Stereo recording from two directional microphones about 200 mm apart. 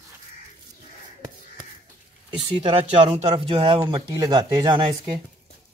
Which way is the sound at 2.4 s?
25° right (ahead or behind).